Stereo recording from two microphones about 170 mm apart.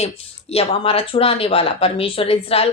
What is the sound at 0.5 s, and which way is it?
Speech, 35° left (ahead or behind).